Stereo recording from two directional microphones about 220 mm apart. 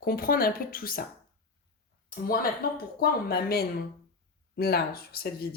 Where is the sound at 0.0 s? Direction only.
40° left (ahead or behind).